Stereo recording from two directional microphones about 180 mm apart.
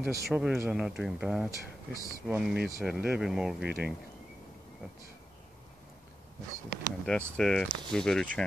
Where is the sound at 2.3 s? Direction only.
5° right (ahead or behind).